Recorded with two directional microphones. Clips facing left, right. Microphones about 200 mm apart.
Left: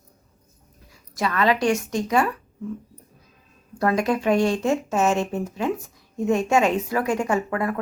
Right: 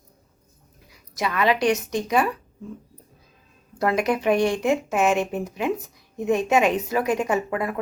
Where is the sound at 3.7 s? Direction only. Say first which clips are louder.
Left 1 dB; 20° right (ahead or behind).